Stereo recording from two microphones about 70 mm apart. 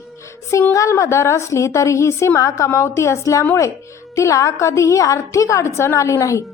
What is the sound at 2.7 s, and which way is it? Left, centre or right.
A woman's voice, left.